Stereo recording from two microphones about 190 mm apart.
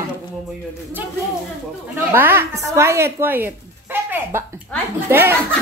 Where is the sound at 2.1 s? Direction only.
10° right (ahead or behind).